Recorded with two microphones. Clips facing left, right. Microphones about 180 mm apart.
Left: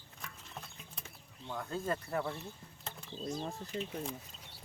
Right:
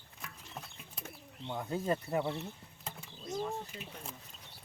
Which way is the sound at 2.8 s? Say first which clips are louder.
Right 1 dB; 10° right (ahead or behind).